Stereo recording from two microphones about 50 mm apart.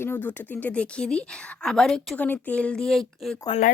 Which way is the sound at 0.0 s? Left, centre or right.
Left.